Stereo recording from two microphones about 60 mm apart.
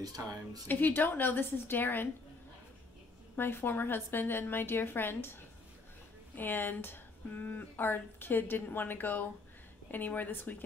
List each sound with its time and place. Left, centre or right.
0.0 s a woman's voice: right
0.7 s speech: left
3.3 s speech: left